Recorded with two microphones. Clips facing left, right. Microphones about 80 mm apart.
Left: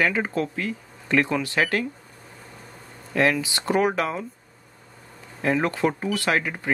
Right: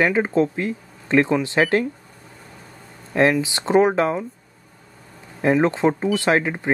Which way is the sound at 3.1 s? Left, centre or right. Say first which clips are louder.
Right 4 dB; right.